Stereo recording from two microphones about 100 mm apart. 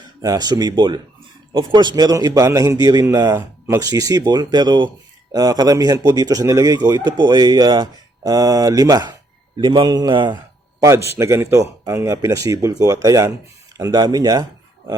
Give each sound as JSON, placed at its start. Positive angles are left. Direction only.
{"t": 0.2, "sound": "speech", "side_deg": -40}
{"t": 10.1, "sound": "speech", "side_deg": -55}
{"t": 10.8, "sound": "a man's voice", "side_deg": -25}